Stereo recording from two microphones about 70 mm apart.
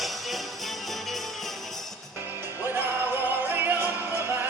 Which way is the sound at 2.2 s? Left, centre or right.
Right.